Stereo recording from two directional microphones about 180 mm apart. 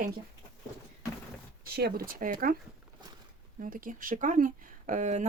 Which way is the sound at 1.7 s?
60° right (ahead or behind).